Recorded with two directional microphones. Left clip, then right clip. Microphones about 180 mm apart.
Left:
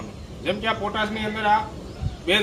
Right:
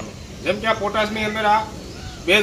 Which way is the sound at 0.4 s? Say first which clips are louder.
Right 4 dB; 15° left (ahead or behind).